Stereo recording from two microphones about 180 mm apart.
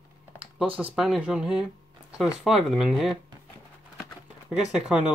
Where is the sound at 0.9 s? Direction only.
Centre (ahead or behind).